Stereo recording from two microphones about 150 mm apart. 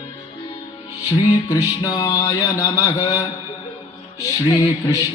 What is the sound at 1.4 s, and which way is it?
Mantra, 25° left (ahead or behind).